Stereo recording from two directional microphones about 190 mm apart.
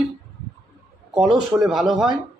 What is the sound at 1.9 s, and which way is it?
Speech, 20° right (ahead or behind).